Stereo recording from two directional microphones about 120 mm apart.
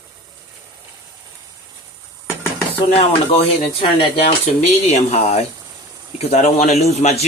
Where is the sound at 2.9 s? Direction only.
60° left (ahead or behind).